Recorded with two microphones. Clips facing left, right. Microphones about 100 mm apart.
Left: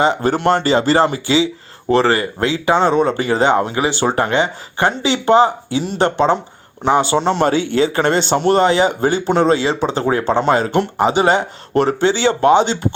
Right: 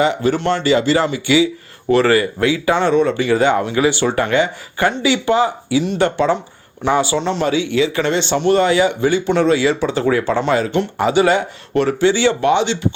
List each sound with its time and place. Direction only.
0.0 s speech: 35° left (ahead or behind)
7.2 s speech: 50° left (ahead or behind)
8.5 s speech: 30° left (ahead or behind)
11.7 s speech: 35° left (ahead or behind)